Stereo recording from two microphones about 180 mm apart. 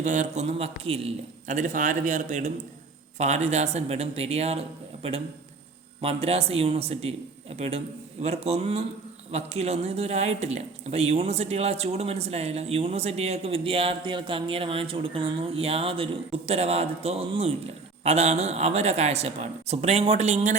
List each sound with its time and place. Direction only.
0.0 s a man's voice: 45° right (ahead or behind)